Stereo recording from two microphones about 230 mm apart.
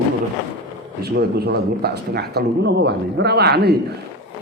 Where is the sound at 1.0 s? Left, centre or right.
Right.